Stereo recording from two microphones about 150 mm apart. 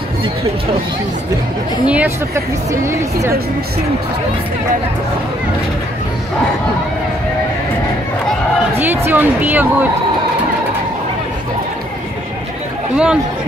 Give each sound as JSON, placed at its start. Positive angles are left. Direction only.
{"t": 1.9, "sound": "speech", "side_deg": -15}
{"t": 8.7, "sound": "speech", "side_deg": -15}
{"t": 12.9, "sound": "speech", "side_deg": -5}